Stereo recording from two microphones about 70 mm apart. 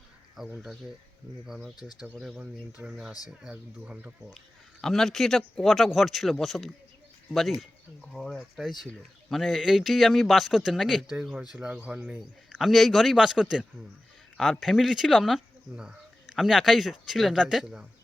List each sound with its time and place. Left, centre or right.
0.3 s a man's voice: centre
4.8 s a man's voice: centre
12.6 s a man's voice: centre
14.3 s a man's voice: centre